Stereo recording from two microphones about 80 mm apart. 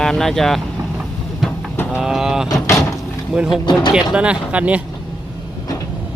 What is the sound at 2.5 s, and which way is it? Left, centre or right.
Vehicle, left.